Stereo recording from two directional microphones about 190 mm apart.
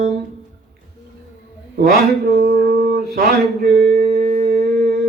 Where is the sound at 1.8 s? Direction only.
55° right (ahead or behind).